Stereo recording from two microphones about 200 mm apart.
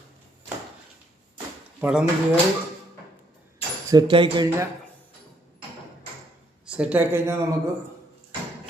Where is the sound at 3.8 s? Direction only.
20° right (ahead or behind).